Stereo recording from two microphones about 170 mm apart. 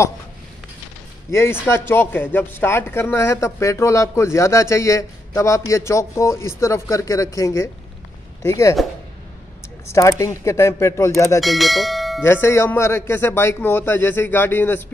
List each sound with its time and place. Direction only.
1.3 s a man's voice: 15° left (ahead or behind)
9.8 s a man's voice: 15° left (ahead or behind)
11.4 s speech: centre (ahead or behind)
12.2 s a man's voice: 15° left (ahead or behind)